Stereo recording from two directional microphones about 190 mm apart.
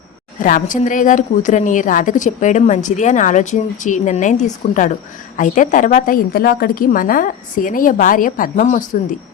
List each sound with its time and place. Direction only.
0.3 s speech: 45° left (ahead or behind)
5.4 s a woman's voice: 45° left (ahead or behind)